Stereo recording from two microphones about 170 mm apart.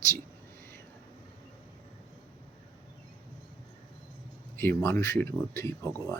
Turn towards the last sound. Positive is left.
turn(degrees=15)  # may be behind; listen again after turning